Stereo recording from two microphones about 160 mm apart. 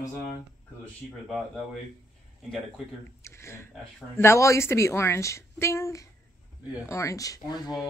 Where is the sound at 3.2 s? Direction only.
15° left (ahead or behind).